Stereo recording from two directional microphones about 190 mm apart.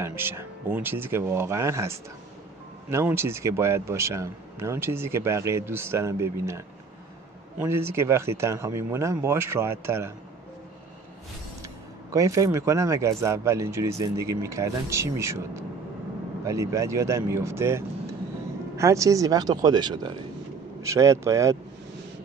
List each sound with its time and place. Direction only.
0.0 s a man's voice: 10° right (ahead or behind)
12.1 s a man's voice: 15° right (ahead or behind)